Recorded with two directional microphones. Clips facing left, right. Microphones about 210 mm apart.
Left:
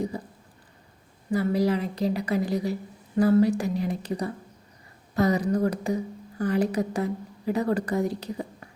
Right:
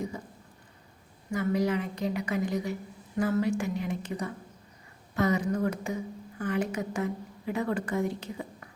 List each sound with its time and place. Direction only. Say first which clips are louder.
1.3 s a woman's voice: left 4 dB; 35° left (ahead or behind)